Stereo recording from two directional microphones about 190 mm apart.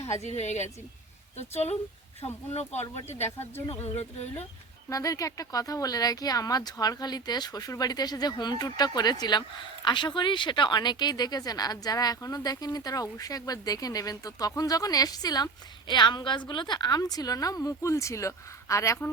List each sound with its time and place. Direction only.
0.1 s a woman's voice: 35° left (ahead or behind)
3.3 s speech: 10° left (ahead or behind)
3.8 s a woman's voice: 35° left (ahead or behind)
4.9 s a woman's voice: 20° left (ahead or behind)